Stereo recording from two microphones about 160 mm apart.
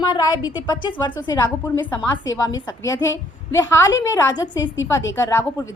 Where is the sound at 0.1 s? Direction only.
25° left (ahead or behind).